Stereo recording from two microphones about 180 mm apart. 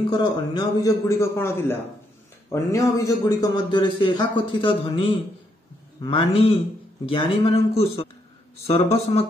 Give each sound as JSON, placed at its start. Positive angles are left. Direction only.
{"t": 0.1, "sound": "a man's voice", "side_deg": 25}